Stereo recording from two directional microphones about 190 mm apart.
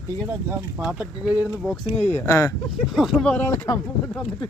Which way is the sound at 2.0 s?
10° left (ahead or behind).